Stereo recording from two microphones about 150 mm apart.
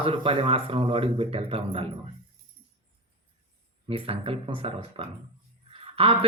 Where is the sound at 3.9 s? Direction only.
40° right (ahead or behind).